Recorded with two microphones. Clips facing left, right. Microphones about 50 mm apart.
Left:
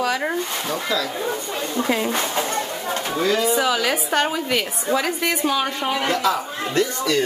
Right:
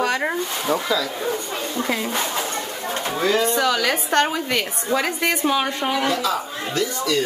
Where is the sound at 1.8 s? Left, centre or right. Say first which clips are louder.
Left 3 dB; centre.